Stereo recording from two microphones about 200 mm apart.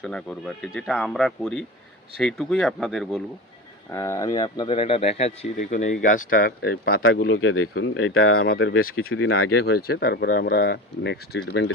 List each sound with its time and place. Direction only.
0.0 s speech: 5° left (ahead or behind)
3.9 s speech: 15° left (ahead or behind); by 7.0 s 50° left (ahead or behind)
7.0 s speech: 70° left (ahead or behind)
8.8 s speech: 50° left (ahead or behind)
9.1 s speech: 80° left
9.6 s speech: 55° left (ahead or behind)